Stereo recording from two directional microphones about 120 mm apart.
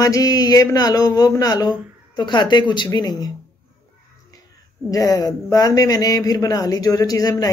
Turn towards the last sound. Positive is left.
turn(degrees=30)  # may be behind; listen again after turning